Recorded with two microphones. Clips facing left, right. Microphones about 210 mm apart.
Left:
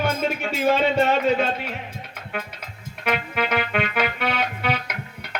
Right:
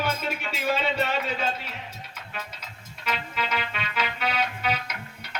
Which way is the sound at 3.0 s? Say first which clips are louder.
Left 7 dB; 55° left (ahead or behind).